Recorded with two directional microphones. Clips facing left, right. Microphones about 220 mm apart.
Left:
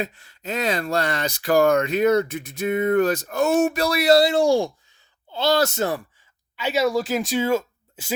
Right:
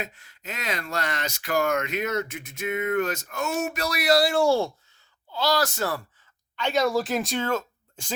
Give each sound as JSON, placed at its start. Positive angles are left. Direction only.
{"t": 0.0, "sound": "speech", "side_deg": 30}
{"t": 6.6, "sound": "speech", "side_deg": 5}